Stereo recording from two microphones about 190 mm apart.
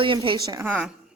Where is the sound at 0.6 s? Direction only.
5° right (ahead or behind).